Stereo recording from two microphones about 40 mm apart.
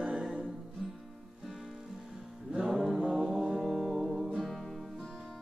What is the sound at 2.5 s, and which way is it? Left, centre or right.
Music, centre.